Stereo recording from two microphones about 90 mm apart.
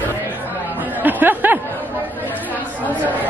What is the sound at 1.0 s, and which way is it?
Speech, 20° right (ahead or behind).